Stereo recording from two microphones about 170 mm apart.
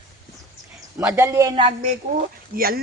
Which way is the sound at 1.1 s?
20° right (ahead or behind).